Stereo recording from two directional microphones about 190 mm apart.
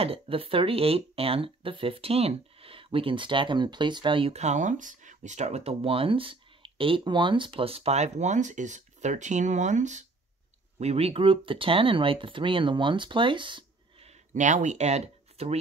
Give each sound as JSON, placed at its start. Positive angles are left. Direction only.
{"t": 0.0, "sound": "speech", "side_deg": -30}